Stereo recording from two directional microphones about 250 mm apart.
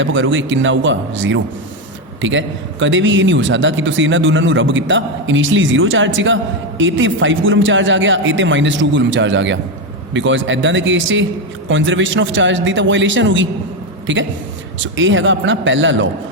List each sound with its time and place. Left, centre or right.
0.0 s a man's voice: right